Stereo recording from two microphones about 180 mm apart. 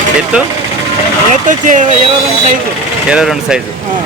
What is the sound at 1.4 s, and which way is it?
Speech, 45° right (ahead or behind).